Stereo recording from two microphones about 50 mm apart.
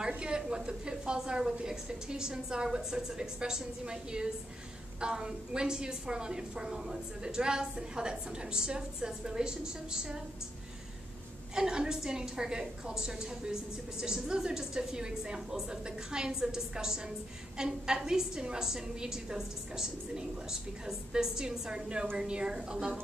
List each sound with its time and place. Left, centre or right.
0.2 s a woman's voice: centre
11.5 s a woman's voice: centre